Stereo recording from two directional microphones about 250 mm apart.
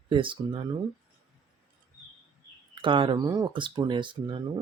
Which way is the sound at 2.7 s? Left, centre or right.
Centre.